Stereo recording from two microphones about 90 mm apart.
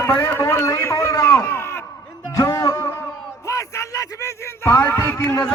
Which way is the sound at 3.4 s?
35° left (ahead or behind).